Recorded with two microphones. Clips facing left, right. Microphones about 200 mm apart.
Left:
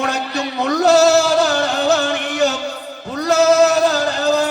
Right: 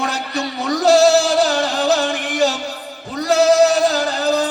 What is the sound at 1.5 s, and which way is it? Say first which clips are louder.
Music: left 1 dB; 65° left (ahead or behind).